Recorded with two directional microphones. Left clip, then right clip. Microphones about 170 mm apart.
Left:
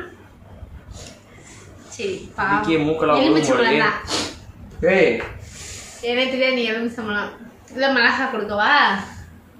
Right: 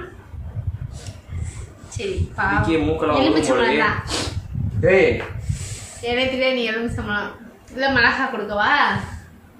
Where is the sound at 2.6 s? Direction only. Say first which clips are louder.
Left 1 dB; 20° left (ahead or behind).